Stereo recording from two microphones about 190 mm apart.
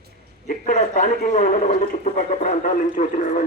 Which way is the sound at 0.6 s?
40° left (ahead or behind).